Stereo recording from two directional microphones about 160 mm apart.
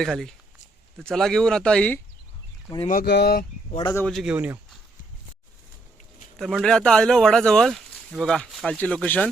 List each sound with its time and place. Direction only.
0.0 s speech: centre (ahead or behind)
2.9 s speech: 80° left
3.9 s speech: 5° left (ahead or behind)
6.4 s speech: centre (ahead or behind)